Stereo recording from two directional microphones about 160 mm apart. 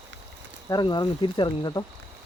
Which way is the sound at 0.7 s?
25° left (ahead or behind).